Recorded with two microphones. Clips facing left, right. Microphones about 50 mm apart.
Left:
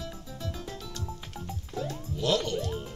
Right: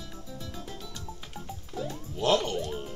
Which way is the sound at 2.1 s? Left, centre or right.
Right.